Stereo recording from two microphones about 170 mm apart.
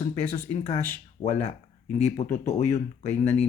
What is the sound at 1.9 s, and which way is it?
Speech, 40° left (ahead or behind).